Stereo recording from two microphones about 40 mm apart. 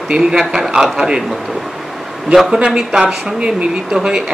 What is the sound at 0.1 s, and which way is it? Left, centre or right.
Speech, centre.